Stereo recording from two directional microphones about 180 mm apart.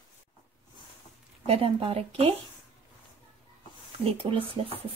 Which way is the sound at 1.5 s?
30° right (ahead or behind).